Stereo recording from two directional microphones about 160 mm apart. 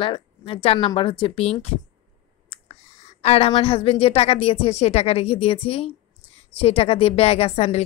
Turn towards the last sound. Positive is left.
turn(degrees=40)  # may be behind; listen again after turning